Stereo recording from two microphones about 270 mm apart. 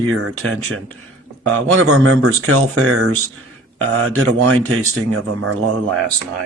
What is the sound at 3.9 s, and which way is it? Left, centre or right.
Speech, right.